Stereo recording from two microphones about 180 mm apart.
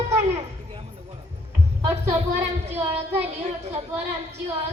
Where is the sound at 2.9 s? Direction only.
10° right (ahead or behind).